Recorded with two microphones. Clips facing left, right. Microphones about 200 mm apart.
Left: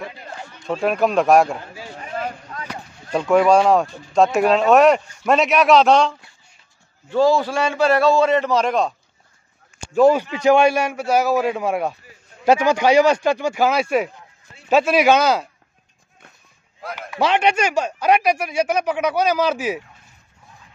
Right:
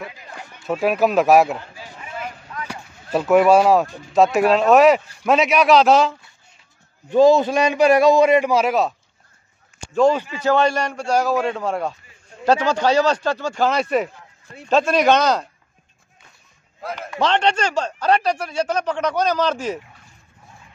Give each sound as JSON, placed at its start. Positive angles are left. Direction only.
{"t": 0.7, "sound": "speech", "side_deg": -5}
{"t": 2.0, "sound": "a sound", "side_deg": 40}
{"t": 2.7, "sound": "speech", "side_deg": -5}
{"t": 7.1, "sound": "a man's voice", "side_deg": -20}
{"t": 9.9, "sound": "a man's voice", "side_deg": 10}
{"t": 16.8, "sound": "a man's voice", "side_deg": 0}